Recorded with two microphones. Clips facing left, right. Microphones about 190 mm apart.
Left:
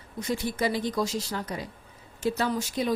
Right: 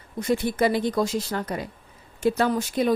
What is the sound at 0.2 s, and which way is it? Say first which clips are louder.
A woman's voice: right 6 dB; 55° right (ahead or behind).